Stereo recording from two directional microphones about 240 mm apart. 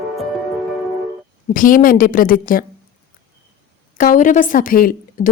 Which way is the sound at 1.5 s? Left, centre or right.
Left.